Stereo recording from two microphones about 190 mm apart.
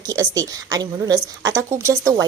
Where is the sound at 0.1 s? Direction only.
20° right (ahead or behind).